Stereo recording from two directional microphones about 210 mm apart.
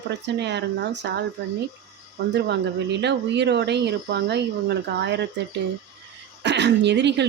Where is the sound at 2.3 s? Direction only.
55° right (ahead or behind).